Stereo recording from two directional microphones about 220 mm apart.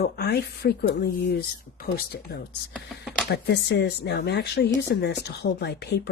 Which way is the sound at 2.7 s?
Centre (ahead or behind).